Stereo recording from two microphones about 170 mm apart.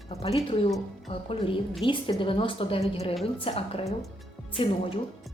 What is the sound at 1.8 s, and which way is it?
A woman's voice, 30° left (ahead or behind).